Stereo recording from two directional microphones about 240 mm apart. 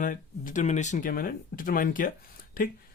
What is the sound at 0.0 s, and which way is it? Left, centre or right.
Speech, left.